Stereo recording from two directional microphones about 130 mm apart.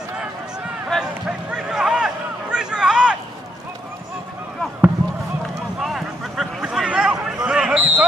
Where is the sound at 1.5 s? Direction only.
5° right (ahead or behind).